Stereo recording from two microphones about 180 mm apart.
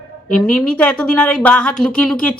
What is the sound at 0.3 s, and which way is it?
A woman's voice, 5° left (ahead or behind).